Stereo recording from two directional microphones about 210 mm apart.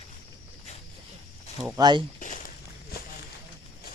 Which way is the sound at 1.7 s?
20° right (ahead or behind).